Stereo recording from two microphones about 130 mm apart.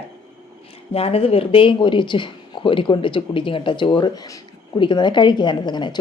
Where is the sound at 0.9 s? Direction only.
50° left (ahead or behind).